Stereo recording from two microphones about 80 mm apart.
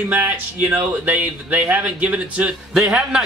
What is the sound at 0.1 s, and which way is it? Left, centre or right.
A man's voice, right.